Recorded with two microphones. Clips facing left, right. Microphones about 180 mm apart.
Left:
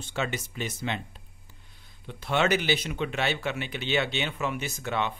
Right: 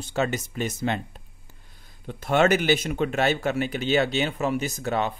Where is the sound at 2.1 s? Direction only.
45° right (ahead or behind).